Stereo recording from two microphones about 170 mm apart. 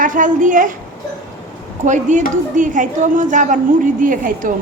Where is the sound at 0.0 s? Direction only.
50° right (ahead or behind).